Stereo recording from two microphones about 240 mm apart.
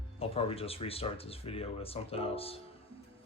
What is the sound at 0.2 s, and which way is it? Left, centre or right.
Speech, left.